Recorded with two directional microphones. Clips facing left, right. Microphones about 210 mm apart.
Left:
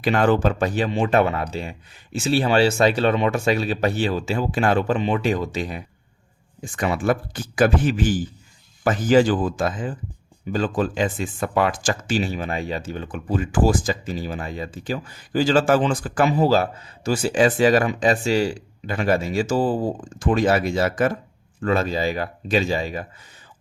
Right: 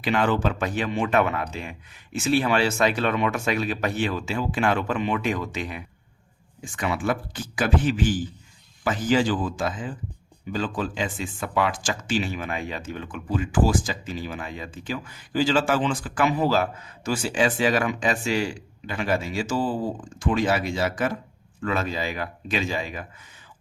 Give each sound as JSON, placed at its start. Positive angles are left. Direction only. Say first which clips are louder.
{"t": 0.0, "sound": "speech", "louder": "left 4 dB", "side_deg": 40}